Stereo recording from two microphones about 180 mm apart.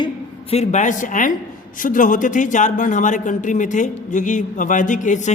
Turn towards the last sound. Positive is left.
turn(degrees=45)  # may be behind; listen again after turning